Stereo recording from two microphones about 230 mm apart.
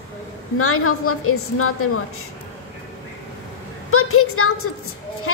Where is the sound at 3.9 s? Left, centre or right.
Left.